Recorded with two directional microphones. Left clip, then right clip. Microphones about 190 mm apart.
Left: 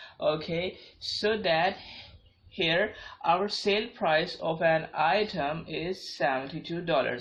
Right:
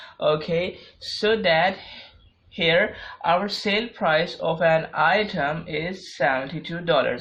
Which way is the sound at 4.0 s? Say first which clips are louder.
Right 5 dB; 40° right (ahead or behind).